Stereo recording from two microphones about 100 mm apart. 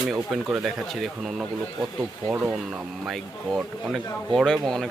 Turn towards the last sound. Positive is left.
turn(degrees=5)  # may be behind; listen again after turning